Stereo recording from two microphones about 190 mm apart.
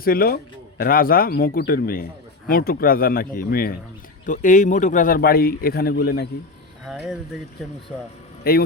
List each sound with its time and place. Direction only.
0.0 s a man's voice: 50° left (ahead or behind)
6.8 s speech: 5° right (ahead or behind)
8.4 s speech: 55° left (ahead or behind)